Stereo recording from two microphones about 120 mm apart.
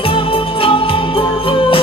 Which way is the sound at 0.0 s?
50° left (ahead or behind).